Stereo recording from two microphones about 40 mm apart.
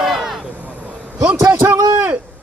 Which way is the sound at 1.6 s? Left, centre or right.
Right.